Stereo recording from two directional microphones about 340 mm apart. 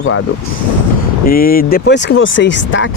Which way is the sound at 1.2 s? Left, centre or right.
Left.